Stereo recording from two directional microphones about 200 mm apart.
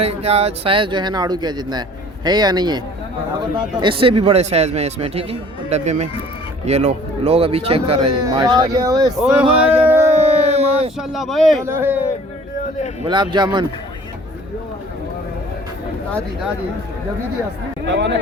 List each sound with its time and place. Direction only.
0.0 s speech: 30° right (ahead or behind)
9.2 s speech: 5° right (ahead or behind)
10.1 s a sound: 35° right (ahead or behind)
10.9 s speech: centre (ahead or behind)
11.6 s speech: 10° right (ahead or behind)
13.1 s speech: 20° right (ahead or behind)
17.8 s speech: 65° right (ahead or behind)